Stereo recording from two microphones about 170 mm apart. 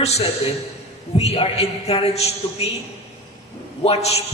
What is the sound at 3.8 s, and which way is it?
Speech, 40° left (ahead or behind).